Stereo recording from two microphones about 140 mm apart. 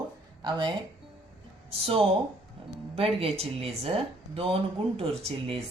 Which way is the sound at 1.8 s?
45° right (ahead or behind).